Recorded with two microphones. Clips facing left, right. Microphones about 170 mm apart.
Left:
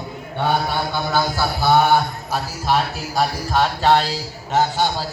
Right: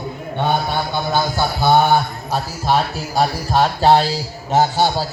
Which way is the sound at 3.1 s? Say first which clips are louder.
Right 3 dB; 30° right (ahead or behind).